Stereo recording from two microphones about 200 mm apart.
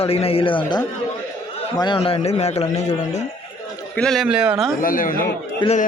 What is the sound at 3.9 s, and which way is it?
Speech, centre (ahead or behind).